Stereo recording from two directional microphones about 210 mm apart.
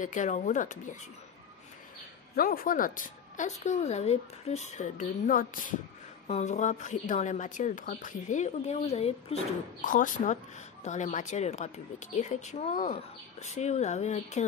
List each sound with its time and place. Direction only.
0.0 s a woman's voice: 35° left (ahead or behind)
2.3 s a woman's voice: 45° left (ahead or behind)